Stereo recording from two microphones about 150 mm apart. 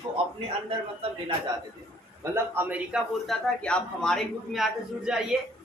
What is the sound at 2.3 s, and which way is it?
Speech, 10° right (ahead or behind).